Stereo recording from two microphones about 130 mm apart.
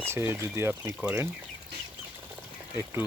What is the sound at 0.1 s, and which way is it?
Speech, 20° right (ahead or behind).